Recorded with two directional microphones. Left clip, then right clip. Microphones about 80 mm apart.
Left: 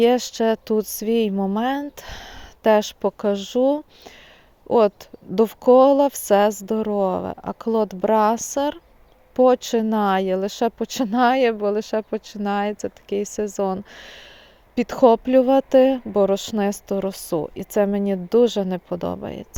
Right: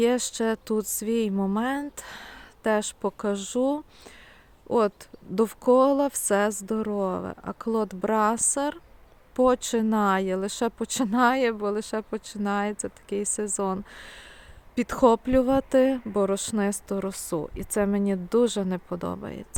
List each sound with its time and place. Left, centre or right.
0.0 s speech: left
2.4 s a sound: left
2.8 s speech: left